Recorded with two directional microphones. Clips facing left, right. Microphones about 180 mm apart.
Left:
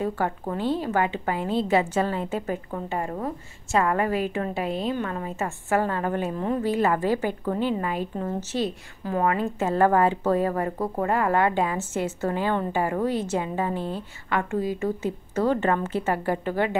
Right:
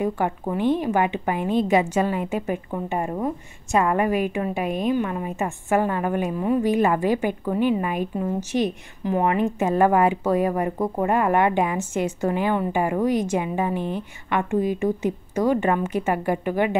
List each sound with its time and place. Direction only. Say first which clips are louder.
0.0 s a woman's voice: right 3 dB; 15° right (ahead or behind)